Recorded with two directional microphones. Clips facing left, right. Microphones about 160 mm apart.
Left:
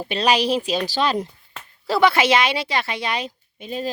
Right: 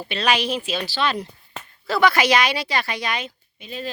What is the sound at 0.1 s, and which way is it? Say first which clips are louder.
Speech: left 3 dB; 35° left (ahead or behind).